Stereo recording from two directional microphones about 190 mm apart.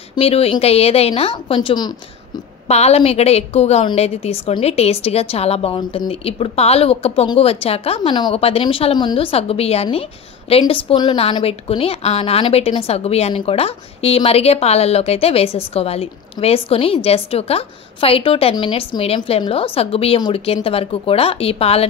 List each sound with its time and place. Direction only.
0.1 s a woman's voice: 30° left (ahead or behind)
2.7 s a woman's voice: 35° left (ahead or behind)